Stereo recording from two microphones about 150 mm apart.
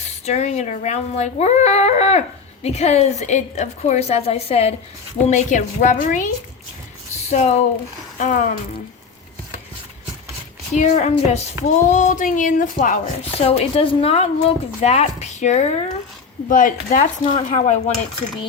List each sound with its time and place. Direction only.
0.3 s a woman's voice: 50° left (ahead or behind)
7.3 s a woman's voice: 50° left (ahead or behind)
10.8 s a woman's voice: 50° left (ahead or behind)
13.3 s a woman's voice: 40° left (ahead or behind)
16.5 s speech: 60° left (ahead or behind)